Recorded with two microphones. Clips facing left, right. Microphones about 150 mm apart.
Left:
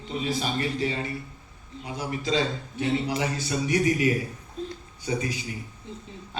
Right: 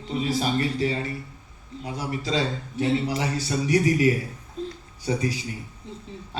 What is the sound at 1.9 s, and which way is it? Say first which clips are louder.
A man's voice: even; 40° right (ahead or behind).